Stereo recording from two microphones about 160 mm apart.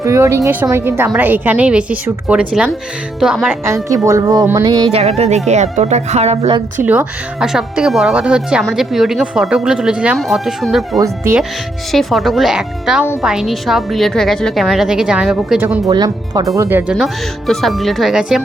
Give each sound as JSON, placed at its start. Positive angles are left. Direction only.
{"t": 0.0, "sound": "a woman's voice", "side_deg": -15}
{"t": 3.5, "sound": "a woman's voice", "side_deg": -15}
{"t": 4.9, "sound": "speech", "side_deg": -40}
{"t": 6.8, "sound": "speech", "side_deg": -10}
{"t": 11.9, "sound": "speech", "side_deg": 0}
{"t": 15.9, "sound": "a woman's voice", "side_deg": -25}
{"t": 17.0, "sound": "speech", "side_deg": 0}